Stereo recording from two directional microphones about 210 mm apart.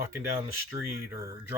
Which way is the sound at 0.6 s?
10° right (ahead or behind).